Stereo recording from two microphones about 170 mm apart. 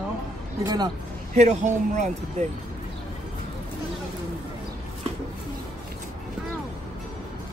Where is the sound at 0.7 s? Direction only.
25° right (ahead or behind).